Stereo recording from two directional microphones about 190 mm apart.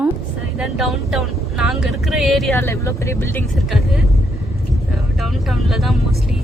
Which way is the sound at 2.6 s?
15° left (ahead or behind).